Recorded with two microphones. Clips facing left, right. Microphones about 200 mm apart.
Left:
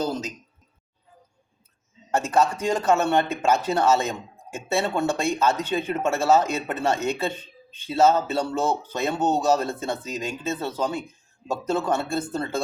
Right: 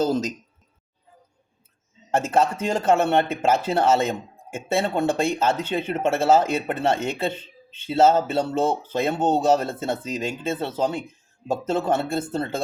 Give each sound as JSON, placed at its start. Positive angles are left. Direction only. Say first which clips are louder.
{"t": 2.0, "sound": "speech", "louder": "right 1 dB", "side_deg": -25}